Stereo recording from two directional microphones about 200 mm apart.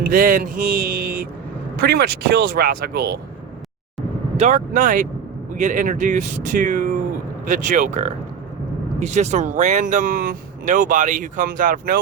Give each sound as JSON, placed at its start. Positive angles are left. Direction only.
{"t": 0.1, "sound": "speech", "side_deg": -45}
{"t": 4.4, "sound": "speech", "side_deg": -35}